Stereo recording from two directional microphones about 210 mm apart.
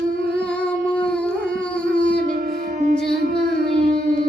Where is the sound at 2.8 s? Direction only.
35° right (ahead or behind).